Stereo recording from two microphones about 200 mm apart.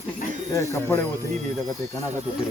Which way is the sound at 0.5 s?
15° left (ahead or behind).